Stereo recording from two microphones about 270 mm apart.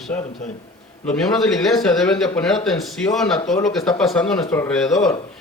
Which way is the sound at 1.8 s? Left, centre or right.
Centre.